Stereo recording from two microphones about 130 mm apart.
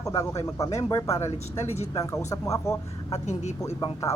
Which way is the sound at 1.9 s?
25° left (ahead or behind).